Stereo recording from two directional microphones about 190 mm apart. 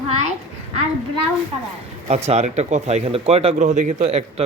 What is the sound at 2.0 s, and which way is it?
Speech, 35° right (ahead or behind).